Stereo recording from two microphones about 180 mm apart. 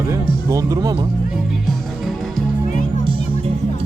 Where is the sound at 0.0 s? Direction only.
15° right (ahead or behind).